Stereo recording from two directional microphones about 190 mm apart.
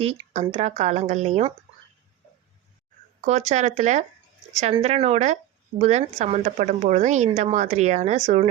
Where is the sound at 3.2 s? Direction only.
35° right (ahead or behind).